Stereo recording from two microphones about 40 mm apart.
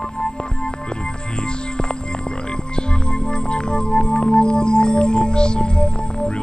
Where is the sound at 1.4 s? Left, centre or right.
Left.